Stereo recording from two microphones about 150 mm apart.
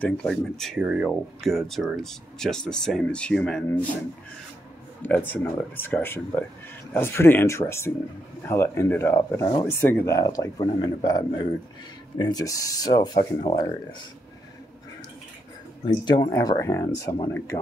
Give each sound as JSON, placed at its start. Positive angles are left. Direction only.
{"t": 0.0, "sound": "speech", "side_deg": 5}
{"t": 0.7, "sound": "speech", "side_deg": -10}
{"t": 5.0, "sound": "a man's voice", "side_deg": 10}
{"t": 16.1, "sound": "speech", "side_deg": 30}
{"t": 16.3, "sound": "a man's voice", "side_deg": 20}